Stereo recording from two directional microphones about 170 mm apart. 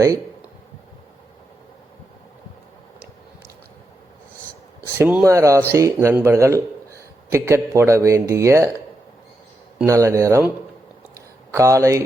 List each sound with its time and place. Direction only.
4.9 s a man's voice: 10° right (ahead or behind)
9.8 s a man's voice: 20° right (ahead or behind)
11.5 s a man's voice: 15° right (ahead or behind)